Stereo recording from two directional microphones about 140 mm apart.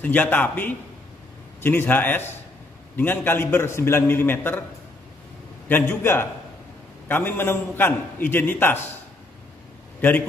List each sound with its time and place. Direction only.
0.0 s a man's voice: 10° left (ahead or behind)
5.7 s a man's voice: 15° left (ahead or behind)
9.9 s a man's voice: 15° left (ahead or behind)